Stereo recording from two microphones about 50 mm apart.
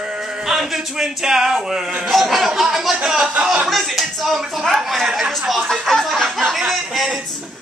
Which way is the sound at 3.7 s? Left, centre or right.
Centre.